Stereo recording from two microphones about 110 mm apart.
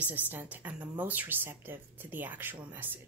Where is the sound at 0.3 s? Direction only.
15° right (ahead or behind).